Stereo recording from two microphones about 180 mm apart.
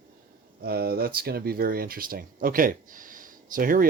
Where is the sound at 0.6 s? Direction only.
60° right (ahead or behind).